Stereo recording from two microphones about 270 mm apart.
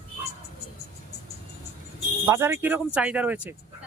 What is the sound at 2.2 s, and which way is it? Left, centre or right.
Speech, centre.